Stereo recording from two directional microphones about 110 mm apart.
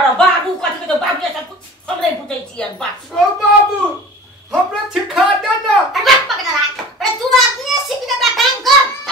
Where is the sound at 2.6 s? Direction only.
10° left (ahead or behind).